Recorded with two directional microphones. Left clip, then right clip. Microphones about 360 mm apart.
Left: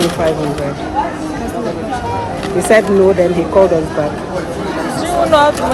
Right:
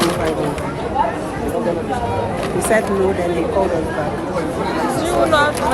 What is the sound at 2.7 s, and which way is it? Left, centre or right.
Speech, left.